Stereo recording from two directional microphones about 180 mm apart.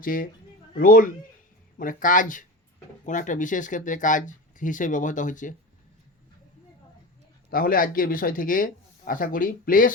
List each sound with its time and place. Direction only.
0.0 s speech: 50° left (ahead or behind)
7.5 s speech: 50° left (ahead or behind)